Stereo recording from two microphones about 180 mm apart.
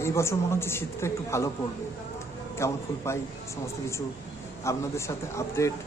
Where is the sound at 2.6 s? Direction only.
15° left (ahead or behind).